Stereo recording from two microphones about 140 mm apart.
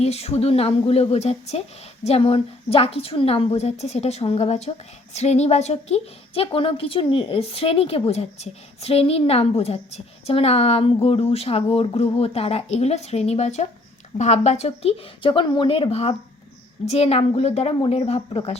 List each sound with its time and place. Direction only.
0.0 s a woman's voice: 45° left (ahead or behind)